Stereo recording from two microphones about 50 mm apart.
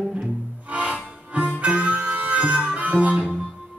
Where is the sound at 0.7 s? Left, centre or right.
Right.